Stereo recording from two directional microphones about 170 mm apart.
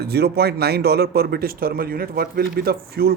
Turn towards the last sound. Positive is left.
turn(degrees=-65)  # may be behind; listen again after turning